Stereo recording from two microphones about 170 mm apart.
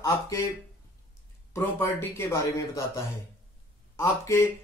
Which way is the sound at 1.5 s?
15° left (ahead or behind).